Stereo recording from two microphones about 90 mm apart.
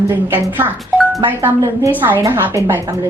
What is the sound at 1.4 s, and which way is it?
Speech, 25° right (ahead or behind).